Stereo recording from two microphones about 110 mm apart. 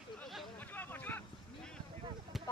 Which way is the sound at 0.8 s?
15° left (ahead or behind).